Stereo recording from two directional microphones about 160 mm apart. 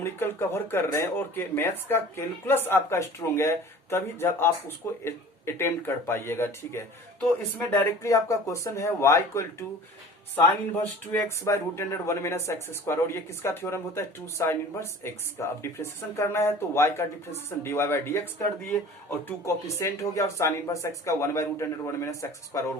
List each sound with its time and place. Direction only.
0.0 s speech: 15° left (ahead or behind)